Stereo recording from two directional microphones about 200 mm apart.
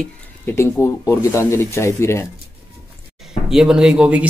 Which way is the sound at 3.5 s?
5° right (ahead or behind).